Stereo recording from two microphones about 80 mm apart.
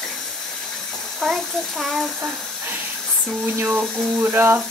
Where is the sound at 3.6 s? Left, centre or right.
Right.